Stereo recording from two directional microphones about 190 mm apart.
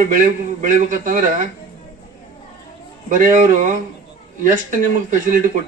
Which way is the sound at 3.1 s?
45° right (ahead or behind).